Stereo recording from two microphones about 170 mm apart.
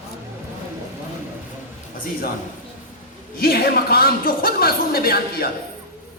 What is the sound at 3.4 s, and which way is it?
A woman's voice, 60° left (ahead or behind).